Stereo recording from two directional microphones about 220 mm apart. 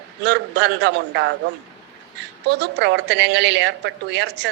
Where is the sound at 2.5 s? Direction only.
50° right (ahead or behind).